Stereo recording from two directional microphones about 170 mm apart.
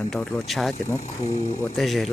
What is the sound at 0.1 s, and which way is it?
Speech, centre (ahead or behind).